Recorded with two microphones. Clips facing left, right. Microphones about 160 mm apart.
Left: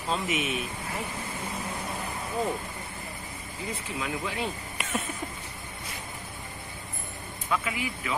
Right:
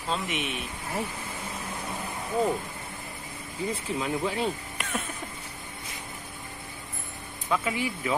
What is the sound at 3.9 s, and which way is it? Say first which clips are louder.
Speech: right 3 dB; 35° right (ahead or behind).